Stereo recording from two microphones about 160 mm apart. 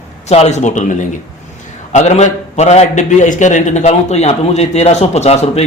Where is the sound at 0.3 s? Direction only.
40° left (ahead or behind).